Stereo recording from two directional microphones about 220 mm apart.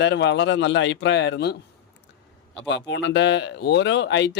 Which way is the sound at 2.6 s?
55° left (ahead or behind).